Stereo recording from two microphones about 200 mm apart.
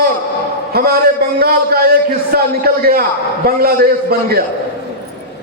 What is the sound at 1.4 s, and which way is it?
A man's voice, 50° right (ahead or behind).